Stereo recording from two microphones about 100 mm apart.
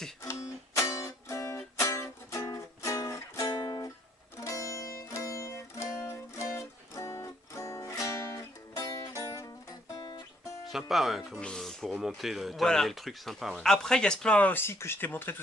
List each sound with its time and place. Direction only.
0.2 s music: 30° left (ahead or behind)
4.4 s music: 35° left (ahead or behind)
9.9 s guitar: 45° left (ahead or behind)
10.7 s speech: centre (ahead or behind); by 15.4 s 20° left (ahead or behind)